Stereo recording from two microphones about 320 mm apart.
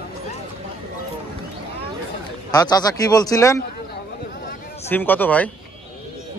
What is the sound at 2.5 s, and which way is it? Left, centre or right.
A man's voice, centre.